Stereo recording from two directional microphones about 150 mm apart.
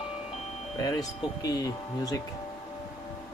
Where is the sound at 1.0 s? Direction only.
25° left (ahead or behind).